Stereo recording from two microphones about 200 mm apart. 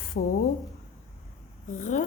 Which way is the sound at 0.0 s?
45° left (ahead or behind).